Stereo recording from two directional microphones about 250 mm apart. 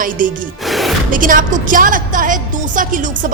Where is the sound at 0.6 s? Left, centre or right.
Centre.